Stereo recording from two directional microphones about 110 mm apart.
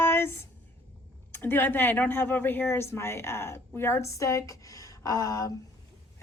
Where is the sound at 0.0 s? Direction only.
20° left (ahead or behind).